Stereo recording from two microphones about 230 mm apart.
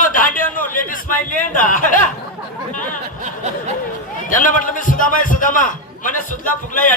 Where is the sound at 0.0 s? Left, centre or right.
Left.